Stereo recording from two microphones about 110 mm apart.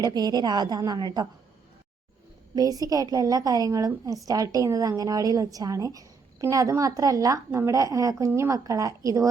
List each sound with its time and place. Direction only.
0.0 s a woman's voice: 35° right (ahead or behind)
2.6 s a woman's voice: 35° right (ahead or behind)